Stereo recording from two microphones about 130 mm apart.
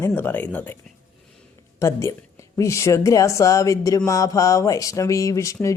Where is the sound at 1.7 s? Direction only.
20° left (ahead or behind).